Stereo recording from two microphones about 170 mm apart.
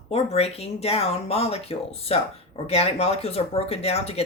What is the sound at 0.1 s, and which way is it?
A woman's voice, 35° left (ahead or behind).